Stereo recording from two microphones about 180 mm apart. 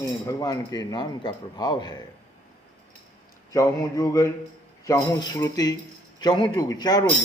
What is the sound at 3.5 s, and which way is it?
Music, 20° left (ahead or behind).